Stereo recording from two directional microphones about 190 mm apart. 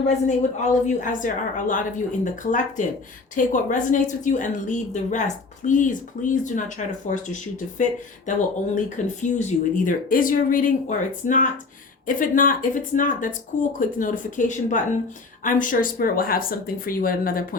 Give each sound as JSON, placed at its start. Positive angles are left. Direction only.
{"t": 0.3, "sound": "a woman's voice", "side_deg": 40}
{"t": 9.2, "sound": "speech", "side_deg": 40}